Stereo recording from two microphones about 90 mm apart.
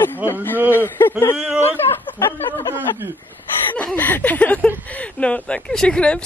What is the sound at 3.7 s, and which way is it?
A woman's voice, 15° left (ahead or behind).